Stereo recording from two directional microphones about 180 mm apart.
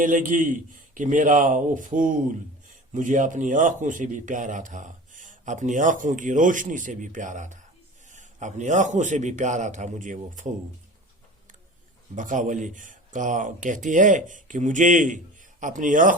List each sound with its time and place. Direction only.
0.0 s a man's voice: 45° right (ahead or behind)
12.1 s a man's voice: 45° right (ahead or behind)